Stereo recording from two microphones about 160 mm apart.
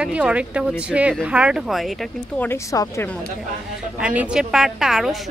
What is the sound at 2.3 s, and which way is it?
Speech, 15° left (ahead or behind).